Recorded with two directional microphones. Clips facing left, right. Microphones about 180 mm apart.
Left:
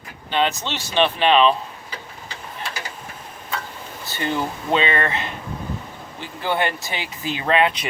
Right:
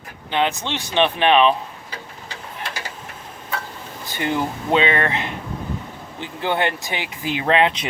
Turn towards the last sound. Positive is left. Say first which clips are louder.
# right 1 dB
turn(degrees=-20)  # may be behind; listen again after turning